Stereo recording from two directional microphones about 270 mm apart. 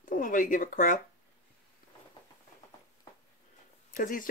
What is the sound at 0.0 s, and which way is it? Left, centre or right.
Speech, left.